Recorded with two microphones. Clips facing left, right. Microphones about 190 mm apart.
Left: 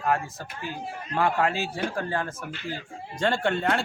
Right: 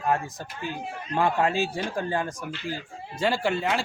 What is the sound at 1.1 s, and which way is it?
A man's voice, 15° right (ahead or behind).